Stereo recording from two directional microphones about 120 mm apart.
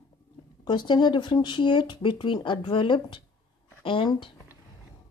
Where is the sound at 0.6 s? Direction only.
40° left (ahead or behind).